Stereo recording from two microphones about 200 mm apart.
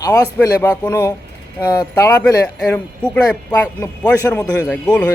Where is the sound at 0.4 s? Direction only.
15° left (ahead or behind).